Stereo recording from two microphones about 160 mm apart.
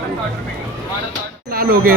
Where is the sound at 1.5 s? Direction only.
70° right (ahead or behind).